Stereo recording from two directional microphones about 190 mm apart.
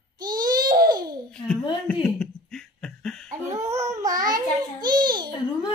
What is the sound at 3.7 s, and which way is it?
Babbling, 15° right (ahead or behind).